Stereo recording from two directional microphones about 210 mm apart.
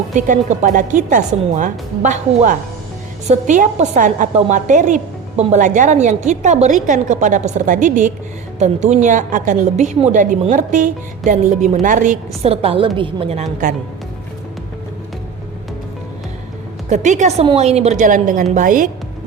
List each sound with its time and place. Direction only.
0.1 s a woman's voice: 35° right (ahead or behind)
12.4 s a woman's voice: 30° right (ahead or behind)
16.9 s a woman's voice: 35° right (ahead or behind)